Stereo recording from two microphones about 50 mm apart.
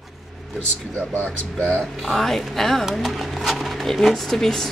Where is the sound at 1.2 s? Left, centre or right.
Left.